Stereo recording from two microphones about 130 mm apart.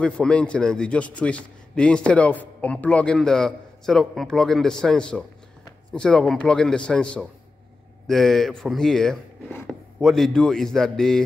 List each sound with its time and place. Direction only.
0.0 s a man's voice: 10° left (ahead or behind)